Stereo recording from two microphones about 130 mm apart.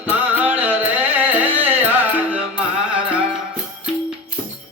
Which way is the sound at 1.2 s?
15° right (ahead or behind).